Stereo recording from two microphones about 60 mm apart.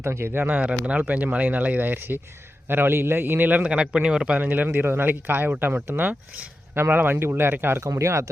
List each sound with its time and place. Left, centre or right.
0.0 s speech: right
0.9 s speech: right
3.6 s a man's voice: centre
4.4 s speech: right
7.9 s speech: right